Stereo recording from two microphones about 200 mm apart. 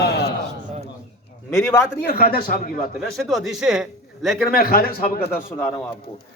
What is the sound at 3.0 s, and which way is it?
A man's voice, centre (ahead or behind).